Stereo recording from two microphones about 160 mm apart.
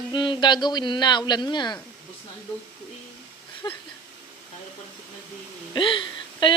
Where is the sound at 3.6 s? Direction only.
25° left (ahead or behind).